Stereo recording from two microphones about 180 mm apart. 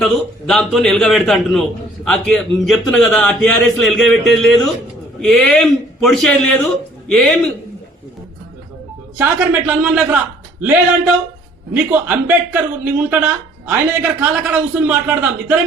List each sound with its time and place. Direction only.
0.0 s a man's voice: centre (ahead or behind)
9.1 s a man's voice: 10° right (ahead or behind)